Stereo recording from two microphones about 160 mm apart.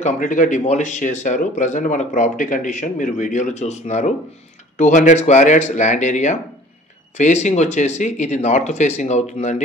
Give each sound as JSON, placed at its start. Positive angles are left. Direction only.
{"t": 0.0, "sound": "speech", "side_deg": 55}